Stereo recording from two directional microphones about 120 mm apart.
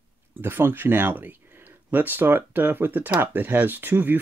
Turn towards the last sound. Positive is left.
turn(degrees=-15)  # may be behind; listen again after turning